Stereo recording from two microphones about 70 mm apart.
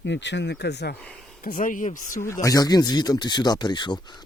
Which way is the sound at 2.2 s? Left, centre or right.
Left.